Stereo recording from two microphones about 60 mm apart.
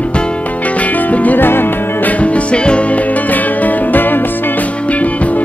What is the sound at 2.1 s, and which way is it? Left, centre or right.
Music, left.